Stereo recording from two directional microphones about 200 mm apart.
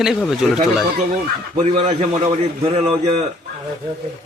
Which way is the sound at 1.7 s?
30° right (ahead or behind).